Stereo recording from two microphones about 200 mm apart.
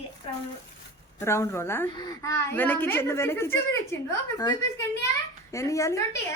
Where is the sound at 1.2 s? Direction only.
15° left (ahead or behind).